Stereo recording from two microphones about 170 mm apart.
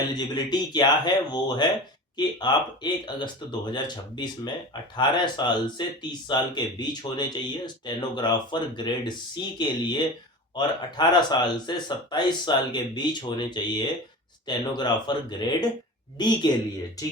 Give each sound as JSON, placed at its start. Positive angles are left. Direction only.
{"t": 0.1, "sound": "speech", "side_deg": 25}